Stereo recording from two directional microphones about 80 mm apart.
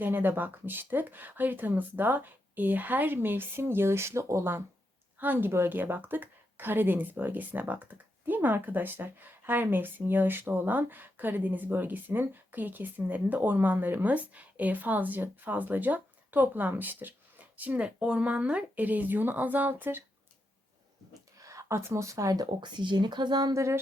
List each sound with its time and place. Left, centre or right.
0.0 s speech: right
5.1 s speech: right
21.3 s speech: right
22.6 s speech: right
23.6 s a sound: right